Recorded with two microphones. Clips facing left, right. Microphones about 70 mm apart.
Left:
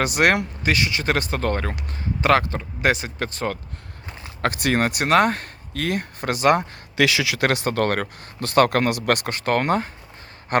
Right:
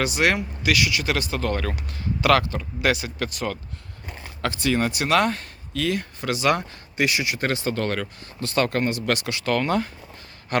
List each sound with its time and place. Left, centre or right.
0.0 s speech: left
0.6 s speech: left
4.4 s speech: left
6.9 s speech: left